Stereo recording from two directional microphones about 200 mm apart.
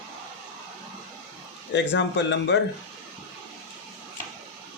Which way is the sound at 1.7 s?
65° left (ahead or behind).